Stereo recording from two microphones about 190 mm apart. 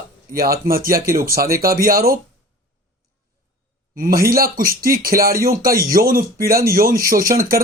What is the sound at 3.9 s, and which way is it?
Speech, 50° right (ahead or behind).